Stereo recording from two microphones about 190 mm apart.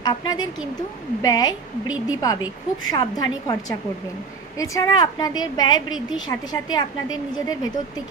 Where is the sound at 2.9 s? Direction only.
20° left (ahead or behind).